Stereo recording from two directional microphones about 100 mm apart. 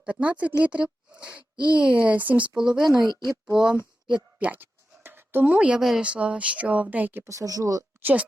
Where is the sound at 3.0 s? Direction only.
45° right (ahead or behind).